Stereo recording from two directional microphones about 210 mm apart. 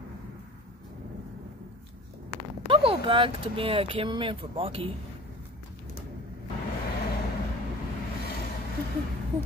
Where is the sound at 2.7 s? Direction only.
25° right (ahead or behind).